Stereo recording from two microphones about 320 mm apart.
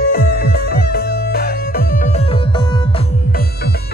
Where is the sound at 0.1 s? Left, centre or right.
Left.